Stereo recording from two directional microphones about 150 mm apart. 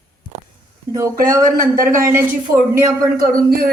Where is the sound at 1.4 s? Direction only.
70° right (ahead or behind).